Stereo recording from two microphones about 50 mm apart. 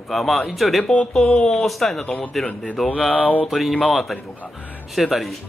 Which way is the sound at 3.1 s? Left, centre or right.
Left.